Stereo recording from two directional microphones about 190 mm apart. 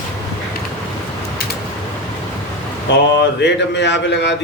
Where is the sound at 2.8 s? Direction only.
65° left (ahead or behind).